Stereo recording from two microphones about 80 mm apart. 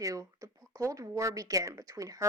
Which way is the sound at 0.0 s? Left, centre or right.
Right.